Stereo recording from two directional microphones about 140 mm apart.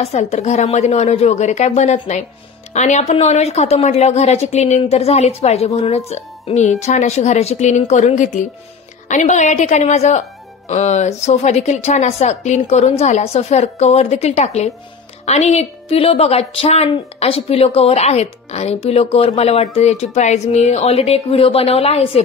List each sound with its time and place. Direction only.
0.0 s a woman's voice: 50° left (ahead or behind)